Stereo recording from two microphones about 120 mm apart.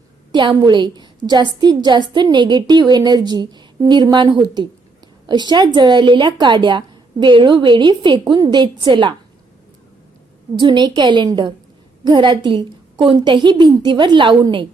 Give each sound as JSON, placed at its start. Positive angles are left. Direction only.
{"t": 0.3, "sound": "a woman's voice", "side_deg": -40}
{"t": 10.5, "sound": "speech", "side_deg": -40}